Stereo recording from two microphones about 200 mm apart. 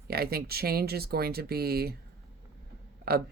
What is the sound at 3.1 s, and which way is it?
Speech, 50° right (ahead or behind).